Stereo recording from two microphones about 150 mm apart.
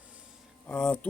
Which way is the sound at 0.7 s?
10° left (ahead or behind).